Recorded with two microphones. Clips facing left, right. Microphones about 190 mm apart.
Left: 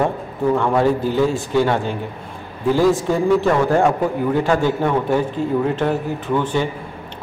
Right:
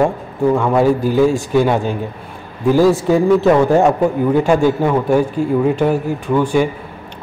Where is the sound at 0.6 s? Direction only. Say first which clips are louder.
Right 2 dB; 10° right (ahead or behind).